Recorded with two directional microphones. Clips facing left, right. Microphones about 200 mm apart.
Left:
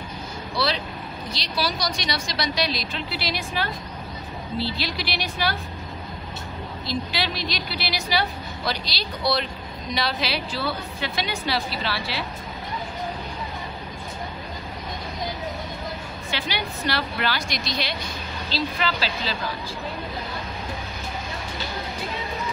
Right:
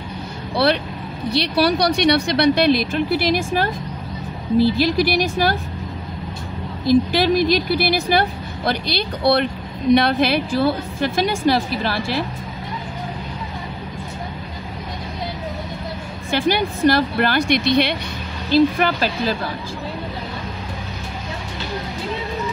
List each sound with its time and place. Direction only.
0.6 s a woman's voice: 60° right (ahead or behind)
6.9 s speech: 50° right (ahead or behind)
16.3 s speech: 50° right (ahead or behind)
18.5 s speech: 50° right (ahead or behind)